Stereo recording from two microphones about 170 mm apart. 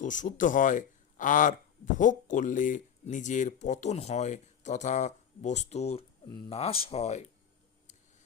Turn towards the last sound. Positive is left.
turn(degrees=40)  # may be behind; listen again after turning